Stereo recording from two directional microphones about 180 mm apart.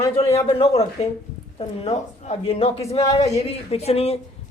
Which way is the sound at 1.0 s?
35° left (ahead or behind).